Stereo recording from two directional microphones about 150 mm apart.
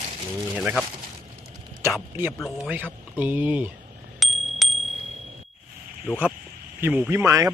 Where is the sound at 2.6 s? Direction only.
10° right (ahead or behind).